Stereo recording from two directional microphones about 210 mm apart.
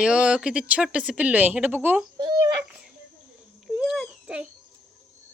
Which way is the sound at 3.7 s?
Centre (ahead or behind).